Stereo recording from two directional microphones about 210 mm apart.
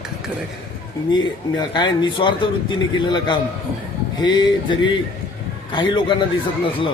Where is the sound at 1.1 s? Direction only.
20° left (ahead or behind).